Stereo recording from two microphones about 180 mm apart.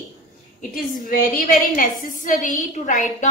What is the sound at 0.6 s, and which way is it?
A woman's voice, 50° left (ahead or behind).